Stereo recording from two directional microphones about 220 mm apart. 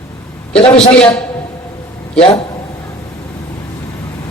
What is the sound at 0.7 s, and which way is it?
Speech, 5° left (ahead or behind).